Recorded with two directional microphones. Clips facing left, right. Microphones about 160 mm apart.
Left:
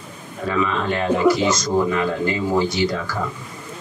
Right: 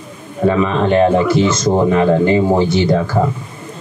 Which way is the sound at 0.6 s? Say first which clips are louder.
Right 7 dB; 35° right (ahead or behind).